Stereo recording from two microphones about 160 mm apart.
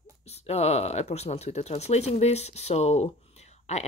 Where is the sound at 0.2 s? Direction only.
40° left (ahead or behind).